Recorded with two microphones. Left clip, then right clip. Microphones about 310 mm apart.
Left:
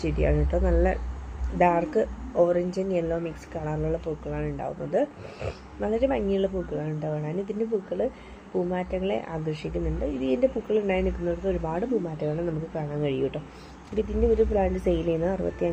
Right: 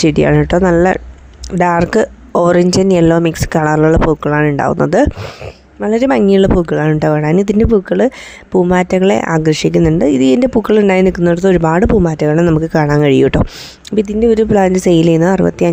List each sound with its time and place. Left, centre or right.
0.0 s speech: right